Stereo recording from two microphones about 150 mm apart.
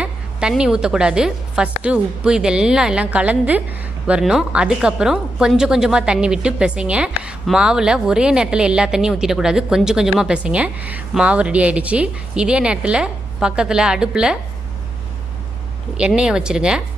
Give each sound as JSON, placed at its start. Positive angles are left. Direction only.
{"t": 0.0, "sound": "a woman's voice", "side_deg": -5}
{"t": 16.0, "sound": "a woman's voice", "side_deg": -5}